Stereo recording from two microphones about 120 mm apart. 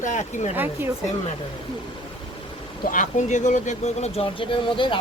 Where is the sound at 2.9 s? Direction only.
90° left.